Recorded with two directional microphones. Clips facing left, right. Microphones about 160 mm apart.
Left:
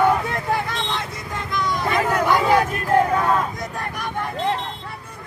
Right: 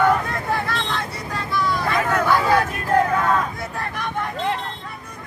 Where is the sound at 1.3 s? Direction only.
20° left (ahead or behind).